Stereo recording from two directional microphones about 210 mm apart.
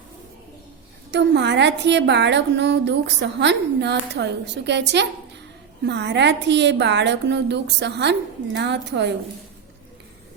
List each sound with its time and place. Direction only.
1.1 s a woman's voice: 55° right (ahead or behind)